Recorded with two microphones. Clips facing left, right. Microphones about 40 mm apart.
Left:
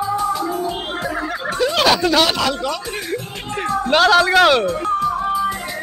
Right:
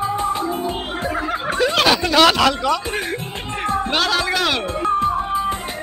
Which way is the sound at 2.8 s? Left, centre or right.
Right.